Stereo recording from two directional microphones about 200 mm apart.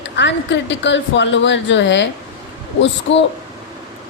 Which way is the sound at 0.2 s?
65° left (ahead or behind).